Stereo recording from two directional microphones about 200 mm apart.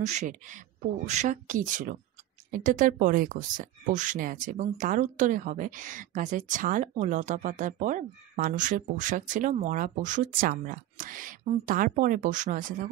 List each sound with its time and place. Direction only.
0.0 s speech: 35° right (ahead or behind)